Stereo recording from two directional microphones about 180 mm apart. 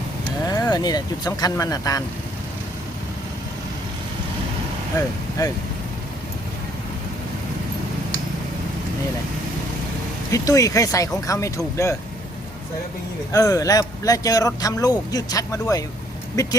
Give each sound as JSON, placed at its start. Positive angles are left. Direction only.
{"t": 0.4, "sound": "speech", "side_deg": 20}
{"t": 5.4, "sound": "speech", "side_deg": 20}
{"t": 10.3, "sound": "speech", "side_deg": 20}
{"t": 13.3, "sound": "speech", "side_deg": 20}